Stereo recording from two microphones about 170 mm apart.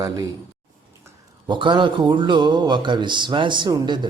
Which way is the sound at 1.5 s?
30° right (ahead or behind).